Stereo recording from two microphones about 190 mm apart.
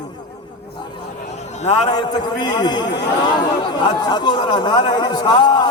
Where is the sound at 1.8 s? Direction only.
20° left (ahead or behind).